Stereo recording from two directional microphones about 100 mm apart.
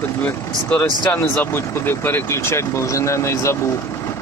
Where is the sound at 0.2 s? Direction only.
20° left (ahead or behind).